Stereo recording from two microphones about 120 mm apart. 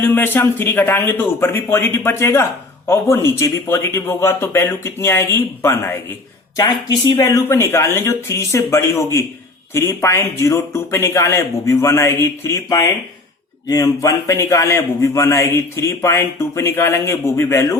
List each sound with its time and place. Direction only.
0.0 s speech: 15° left (ahead or behind)
7.2 s speech: 25° left (ahead or behind)